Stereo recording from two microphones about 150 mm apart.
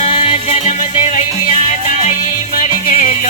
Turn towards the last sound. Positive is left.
turn(degrees=60)  # may be behind; listen again after turning